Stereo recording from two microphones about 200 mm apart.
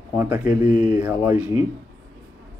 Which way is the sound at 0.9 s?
10° right (ahead or behind).